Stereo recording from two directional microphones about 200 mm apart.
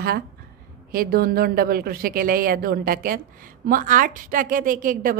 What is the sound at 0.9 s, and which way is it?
A woman's voice, 50° right (ahead or behind).